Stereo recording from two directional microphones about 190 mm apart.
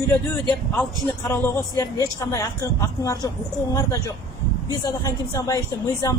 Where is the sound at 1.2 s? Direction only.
15° left (ahead or behind).